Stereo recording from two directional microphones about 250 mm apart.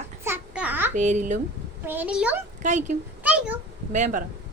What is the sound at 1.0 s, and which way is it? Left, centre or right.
Speech, right.